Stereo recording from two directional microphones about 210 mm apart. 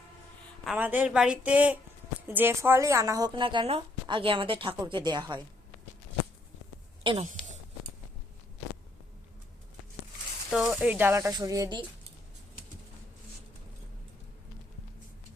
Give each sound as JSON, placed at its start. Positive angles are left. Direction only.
{"t": 0.6, "sound": "a woman's voice", "side_deg": -5}
{"t": 7.0, "sound": "speech", "side_deg": -25}
{"t": 10.5, "sound": "speech", "side_deg": -5}